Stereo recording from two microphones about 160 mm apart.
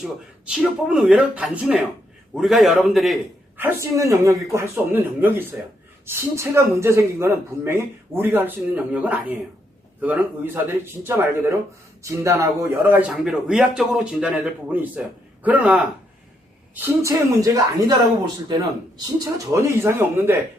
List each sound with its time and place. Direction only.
0.5 s speech: 5° right (ahead or behind)
3.6 s speech: 15° right (ahead or behind)
16.8 s speech: 20° right (ahead or behind)